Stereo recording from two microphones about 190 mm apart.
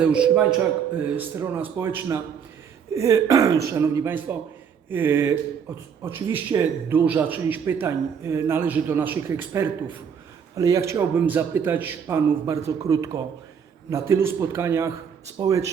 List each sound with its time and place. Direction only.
0.0 s speech: 5° right (ahead or behind)
6.3 s speech: 10° right (ahead or behind)